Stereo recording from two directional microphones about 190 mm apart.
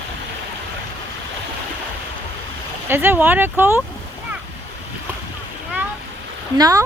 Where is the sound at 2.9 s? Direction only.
10° right (ahead or behind).